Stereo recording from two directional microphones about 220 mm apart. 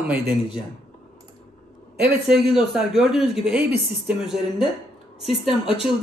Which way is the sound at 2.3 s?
Centre (ahead or behind).